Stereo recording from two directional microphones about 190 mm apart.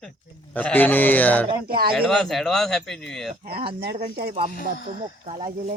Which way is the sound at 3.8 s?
50° right (ahead or behind).